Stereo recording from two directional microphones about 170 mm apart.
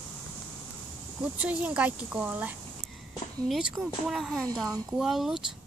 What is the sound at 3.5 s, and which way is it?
Speech, centre (ahead or behind).